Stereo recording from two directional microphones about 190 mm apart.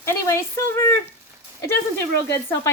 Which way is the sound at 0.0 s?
15° left (ahead or behind).